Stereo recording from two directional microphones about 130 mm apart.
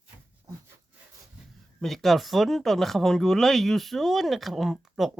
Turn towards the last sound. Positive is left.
turn(degrees=0)  # may be behind; listen again after turning